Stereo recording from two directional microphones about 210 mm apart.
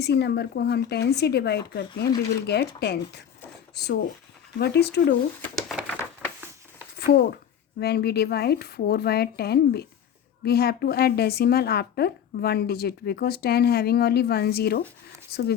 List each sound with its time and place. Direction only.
0.0 s a woman's voice: 50° left (ahead or behind)
4.6 s a woman's voice: 50° left (ahead or behind)
5.4 s a sound: centre (ahead or behind)
7.1 s a woman's voice: 45° left (ahead or behind)